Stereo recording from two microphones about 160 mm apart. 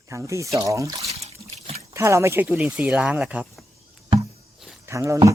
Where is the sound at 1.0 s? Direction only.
40° right (ahead or behind).